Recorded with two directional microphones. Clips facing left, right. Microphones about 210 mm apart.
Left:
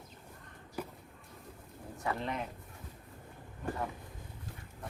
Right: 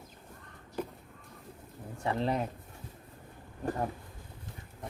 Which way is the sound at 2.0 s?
35° right (ahead or behind).